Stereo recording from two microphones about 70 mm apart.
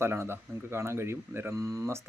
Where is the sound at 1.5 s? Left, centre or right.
Right.